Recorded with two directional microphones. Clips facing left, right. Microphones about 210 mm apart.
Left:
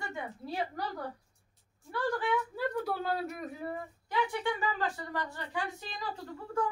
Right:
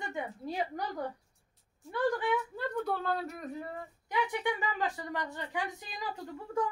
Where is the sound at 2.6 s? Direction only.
5° left (ahead or behind).